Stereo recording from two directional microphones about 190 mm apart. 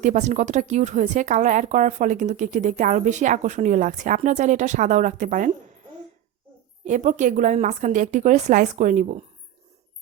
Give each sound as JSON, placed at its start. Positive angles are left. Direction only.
{"t": 0.0, "sound": "speech", "side_deg": -40}
{"t": 6.8, "sound": "speech", "side_deg": -40}